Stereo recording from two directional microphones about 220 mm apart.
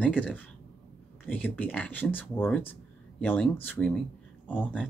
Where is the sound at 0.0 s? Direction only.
5° left (ahead or behind).